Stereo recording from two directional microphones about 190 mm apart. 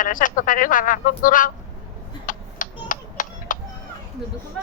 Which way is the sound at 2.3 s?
45° left (ahead or behind).